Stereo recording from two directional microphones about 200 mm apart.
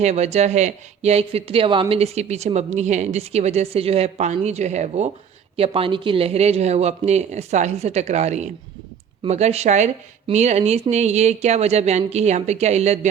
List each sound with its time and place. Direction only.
0.0 s speech: 35° right (ahead or behind)